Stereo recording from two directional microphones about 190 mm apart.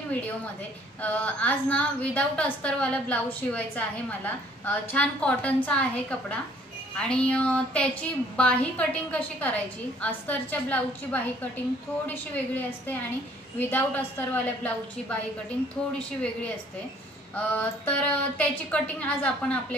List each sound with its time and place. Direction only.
1.0 s a woman's voice: 5° left (ahead or behind)
17.4 s a woman's voice: 5° left (ahead or behind)